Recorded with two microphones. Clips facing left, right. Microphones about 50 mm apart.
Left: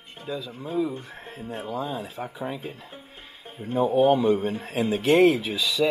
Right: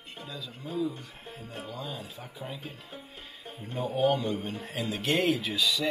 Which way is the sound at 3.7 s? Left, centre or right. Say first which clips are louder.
Left 7 dB; left.